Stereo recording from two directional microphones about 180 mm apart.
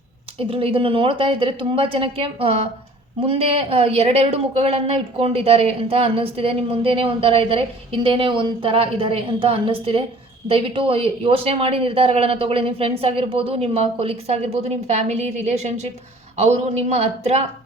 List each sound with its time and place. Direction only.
0.3 s a woman's voice: 30° right (ahead or behind)